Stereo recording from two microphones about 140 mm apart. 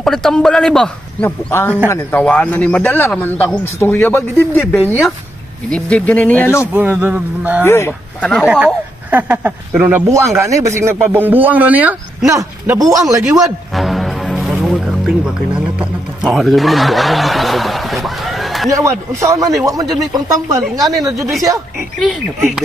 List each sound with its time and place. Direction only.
0.0 s speech: 5° left (ahead or behind)
1.5 s speech: 15° left (ahead or behind)
6.7 s speech: 15° right (ahead or behind)
7.6 s speech: 20° left (ahead or behind)
8.5 s speech: 10° right (ahead or behind)
12.2 s speech: 25° right (ahead or behind)
13.7 s speech: centre (ahead or behind)
18.7 s speech: 20° right (ahead or behind)